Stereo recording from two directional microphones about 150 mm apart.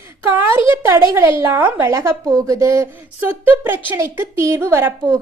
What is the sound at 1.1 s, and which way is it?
A woman's voice, 20° right (ahead or behind).